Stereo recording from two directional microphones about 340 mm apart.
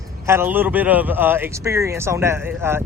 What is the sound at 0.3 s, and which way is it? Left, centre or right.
Speech, centre.